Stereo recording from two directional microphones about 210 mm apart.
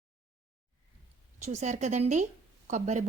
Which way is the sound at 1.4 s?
35° right (ahead or behind).